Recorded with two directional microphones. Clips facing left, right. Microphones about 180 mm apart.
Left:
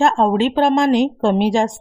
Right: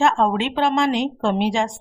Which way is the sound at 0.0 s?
35° left (ahead or behind).